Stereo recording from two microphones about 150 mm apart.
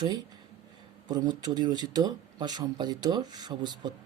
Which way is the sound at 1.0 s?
30° right (ahead or behind).